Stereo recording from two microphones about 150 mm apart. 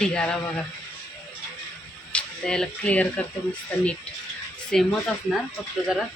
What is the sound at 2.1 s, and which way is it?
Speech, 5° left (ahead or behind).